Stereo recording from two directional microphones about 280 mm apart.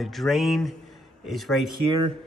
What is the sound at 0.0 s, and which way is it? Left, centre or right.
Speech, centre.